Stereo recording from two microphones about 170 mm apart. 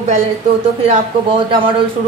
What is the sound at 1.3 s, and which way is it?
Speech, 30° right (ahead or behind).